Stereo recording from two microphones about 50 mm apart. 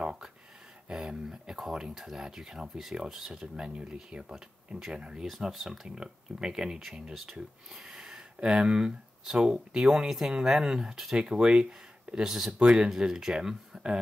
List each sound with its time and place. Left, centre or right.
0.0 s a sound: centre
0.8 s speech: centre
5.2 s speech: centre